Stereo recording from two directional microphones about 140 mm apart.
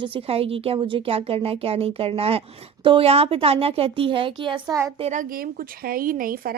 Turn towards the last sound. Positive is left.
turn(degrees=-85)